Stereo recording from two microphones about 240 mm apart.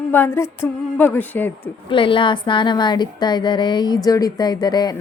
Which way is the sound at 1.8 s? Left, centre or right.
Left.